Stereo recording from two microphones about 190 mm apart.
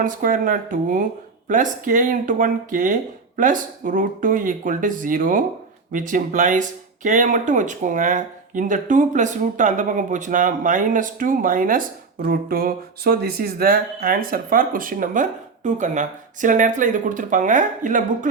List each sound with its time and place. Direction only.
0.0 s speech: 45° right (ahead or behind)